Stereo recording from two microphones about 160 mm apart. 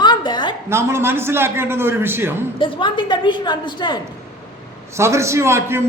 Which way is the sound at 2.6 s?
30° left (ahead or behind).